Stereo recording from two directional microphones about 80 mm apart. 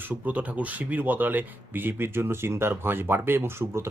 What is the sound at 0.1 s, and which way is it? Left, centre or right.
Speech, centre.